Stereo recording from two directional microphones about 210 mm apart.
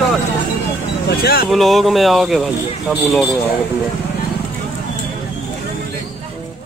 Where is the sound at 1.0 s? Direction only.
45° left (ahead or behind).